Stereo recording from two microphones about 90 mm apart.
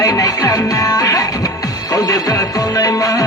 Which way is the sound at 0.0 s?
40° left (ahead or behind).